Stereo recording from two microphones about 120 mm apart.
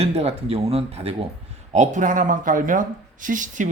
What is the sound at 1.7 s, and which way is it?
Speech, 85° right.